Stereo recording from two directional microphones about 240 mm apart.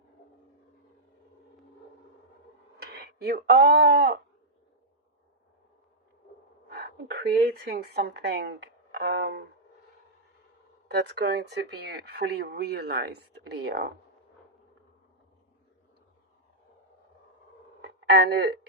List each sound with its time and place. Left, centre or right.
2.7 s speech: right
6.7 s speech: right
10.8 s speech: right
17.8 s speech: right